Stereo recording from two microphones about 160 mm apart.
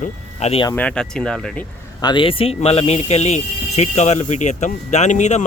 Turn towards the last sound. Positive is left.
turn(degrees=45)  # may be behind; listen again after turning